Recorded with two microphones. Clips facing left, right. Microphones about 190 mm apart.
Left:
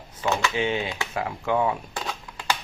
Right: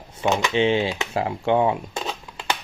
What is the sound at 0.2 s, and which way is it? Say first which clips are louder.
Speech: right 4 dB; 20° right (ahead or behind).